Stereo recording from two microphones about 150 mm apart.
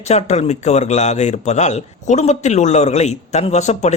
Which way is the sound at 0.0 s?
45° left (ahead or behind).